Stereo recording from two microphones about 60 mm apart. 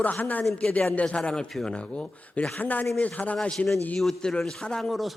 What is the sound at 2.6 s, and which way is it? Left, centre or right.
Speech, left.